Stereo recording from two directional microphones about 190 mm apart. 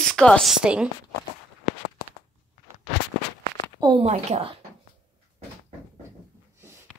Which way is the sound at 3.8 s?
30° right (ahead or behind).